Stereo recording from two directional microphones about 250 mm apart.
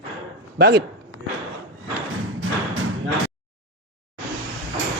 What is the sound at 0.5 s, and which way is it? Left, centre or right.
Speech, right.